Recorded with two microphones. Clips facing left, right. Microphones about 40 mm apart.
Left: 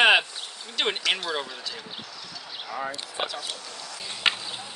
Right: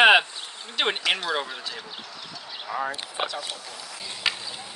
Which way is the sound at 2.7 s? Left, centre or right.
Right.